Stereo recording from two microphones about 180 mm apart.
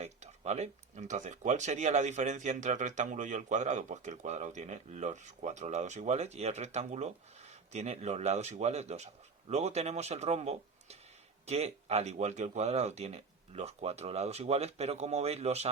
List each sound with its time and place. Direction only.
0.0 s speech: 40° right (ahead or behind)